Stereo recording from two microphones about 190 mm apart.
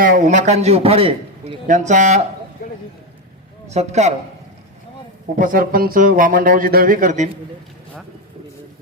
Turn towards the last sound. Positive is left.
turn(degrees=-40)  # may be behind; listen again after turning